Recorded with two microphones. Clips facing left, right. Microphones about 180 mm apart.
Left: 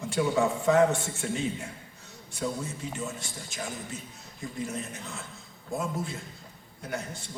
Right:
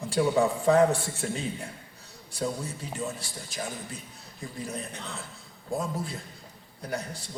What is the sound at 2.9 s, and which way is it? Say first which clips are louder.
A man's voice: right 2 dB; 35° right (ahead or behind).